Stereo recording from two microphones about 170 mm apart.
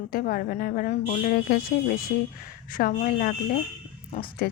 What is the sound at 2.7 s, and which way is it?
Speech, 55° left (ahead or behind).